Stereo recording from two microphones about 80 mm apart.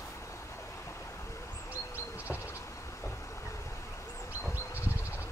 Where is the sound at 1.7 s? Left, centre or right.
Left.